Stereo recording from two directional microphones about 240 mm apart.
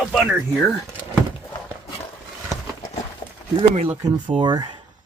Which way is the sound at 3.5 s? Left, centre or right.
Right.